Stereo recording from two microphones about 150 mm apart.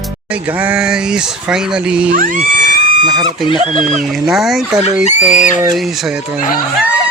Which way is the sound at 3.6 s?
50° right (ahead or behind).